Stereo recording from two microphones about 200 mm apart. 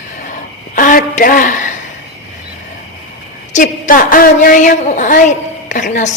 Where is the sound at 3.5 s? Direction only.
40° left (ahead or behind).